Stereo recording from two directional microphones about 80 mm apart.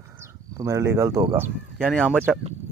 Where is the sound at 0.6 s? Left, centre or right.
Right.